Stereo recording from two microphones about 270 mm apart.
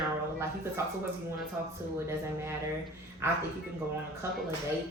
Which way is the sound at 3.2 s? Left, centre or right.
Centre.